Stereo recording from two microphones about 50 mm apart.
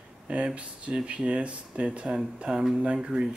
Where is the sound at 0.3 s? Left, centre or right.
Right.